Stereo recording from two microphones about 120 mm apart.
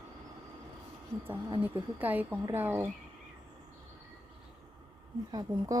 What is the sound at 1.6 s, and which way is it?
Speech, 15° right (ahead or behind).